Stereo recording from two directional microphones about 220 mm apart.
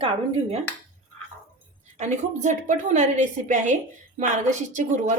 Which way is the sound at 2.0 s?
30° right (ahead or behind).